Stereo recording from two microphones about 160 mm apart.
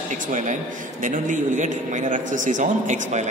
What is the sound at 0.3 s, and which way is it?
A man's voice, 50° right (ahead or behind).